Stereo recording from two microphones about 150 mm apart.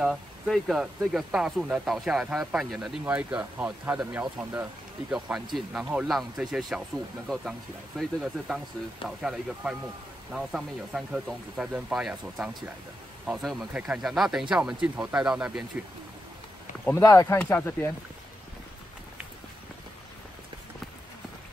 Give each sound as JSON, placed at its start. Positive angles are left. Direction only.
{"t": 0.0, "sound": "speech", "side_deg": 0}
{"t": 8.0, "sound": "speech", "side_deg": 0}
{"t": 16.8, "sound": "speech", "side_deg": 20}